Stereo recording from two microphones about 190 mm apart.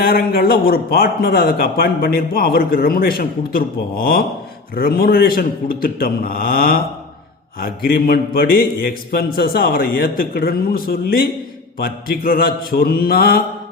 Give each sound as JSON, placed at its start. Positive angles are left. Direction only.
{"t": 0.0, "sound": "a man's voice", "side_deg": 55}